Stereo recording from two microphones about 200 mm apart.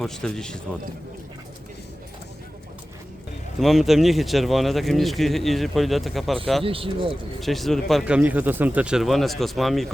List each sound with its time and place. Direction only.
0.0 s speech: 5° left (ahead or behind)
3.6 s speech: centre (ahead or behind)
6.7 s speech: 25° right (ahead or behind)
7.3 s speech: centre (ahead or behind)